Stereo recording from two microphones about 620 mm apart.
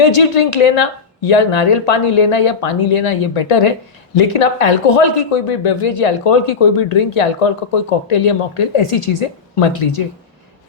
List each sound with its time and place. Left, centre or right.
0.2 s speech: left
1.9 s speech: left
4.1 s speech: left
6.7 s speech: left
8.0 s speech: left
8.3 s speech: left
8.9 s speech: left